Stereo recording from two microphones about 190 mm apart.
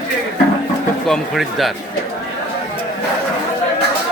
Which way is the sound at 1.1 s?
Centre (ahead or behind).